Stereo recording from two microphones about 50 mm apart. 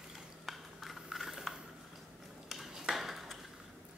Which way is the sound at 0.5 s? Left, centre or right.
Centre.